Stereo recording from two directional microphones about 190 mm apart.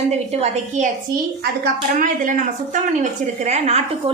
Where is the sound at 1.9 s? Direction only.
45° right (ahead or behind).